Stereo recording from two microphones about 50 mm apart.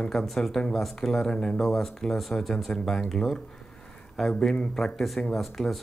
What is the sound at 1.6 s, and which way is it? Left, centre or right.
Speech, centre.